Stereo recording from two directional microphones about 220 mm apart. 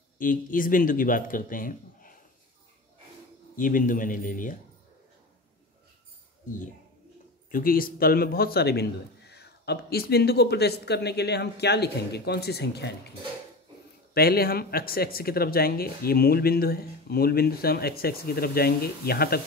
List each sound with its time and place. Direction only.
0.2 s speech: 40° left (ahead or behind)
3.5 s speech: 40° left (ahead or behind)
7.5 s a man's voice: 40° left (ahead or behind)
14.1 s a man's voice: 45° left (ahead or behind)